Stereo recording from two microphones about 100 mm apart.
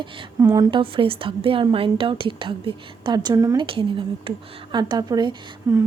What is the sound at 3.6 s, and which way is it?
A woman's voice, 60° right (ahead or behind).